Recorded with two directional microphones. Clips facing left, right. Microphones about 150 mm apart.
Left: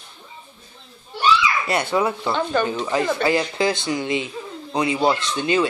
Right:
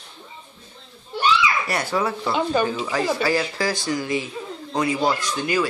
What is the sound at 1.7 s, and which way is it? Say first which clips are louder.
Speech: left 3 dB; 20° left (ahead or behind).